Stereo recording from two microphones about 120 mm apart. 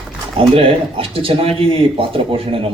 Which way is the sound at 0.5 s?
50° right (ahead or behind).